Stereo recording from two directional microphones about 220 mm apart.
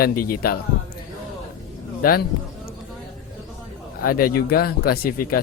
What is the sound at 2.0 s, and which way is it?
Speech, 40° left (ahead or behind).